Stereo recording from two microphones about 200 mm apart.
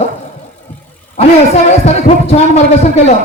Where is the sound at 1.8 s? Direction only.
30° left (ahead or behind).